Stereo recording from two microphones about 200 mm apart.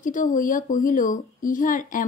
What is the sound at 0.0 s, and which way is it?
A woman's voice, 40° left (ahead or behind).